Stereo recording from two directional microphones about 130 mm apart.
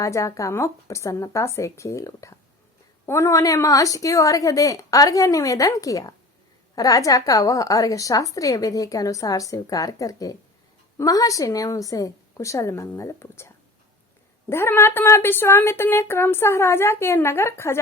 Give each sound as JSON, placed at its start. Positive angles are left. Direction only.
{"t": 0.0, "sound": "a woman's voice", "side_deg": 25}
{"t": 14.5, "sound": "a woman's voice", "side_deg": 20}